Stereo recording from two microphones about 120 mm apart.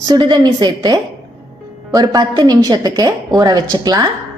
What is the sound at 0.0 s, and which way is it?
A woman's voice, 35° right (ahead or behind).